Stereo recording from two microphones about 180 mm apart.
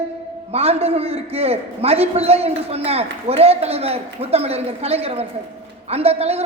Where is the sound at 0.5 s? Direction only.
35° right (ahead or behind).